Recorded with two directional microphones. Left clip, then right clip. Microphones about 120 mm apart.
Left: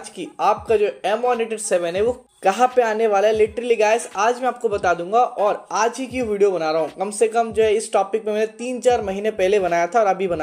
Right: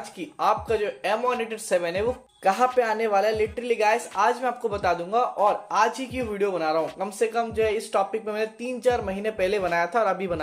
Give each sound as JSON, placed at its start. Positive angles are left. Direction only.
{"t": 0.2, "sound": "a woman's voice", "side_deg": 45}